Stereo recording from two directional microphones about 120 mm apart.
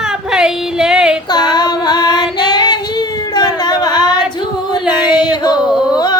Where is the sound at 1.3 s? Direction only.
35° left (ahead or behind).